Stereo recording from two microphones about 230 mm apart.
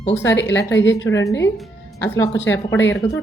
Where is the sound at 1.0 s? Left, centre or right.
Centre.